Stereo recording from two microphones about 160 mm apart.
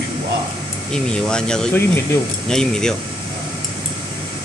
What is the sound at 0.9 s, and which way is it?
Speech, 5° left (ahead or behind).